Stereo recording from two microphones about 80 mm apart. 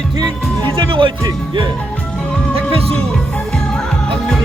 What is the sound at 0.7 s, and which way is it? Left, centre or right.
Speech, right.